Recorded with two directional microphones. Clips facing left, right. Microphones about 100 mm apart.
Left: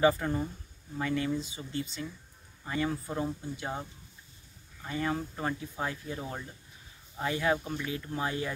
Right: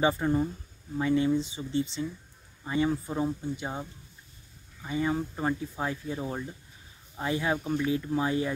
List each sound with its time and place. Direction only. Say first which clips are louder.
0.2 s speech: right 5 dB; 20° right (ahead or behind)
4.8 s speech: right 3 dB; 15° right (ahead or behind)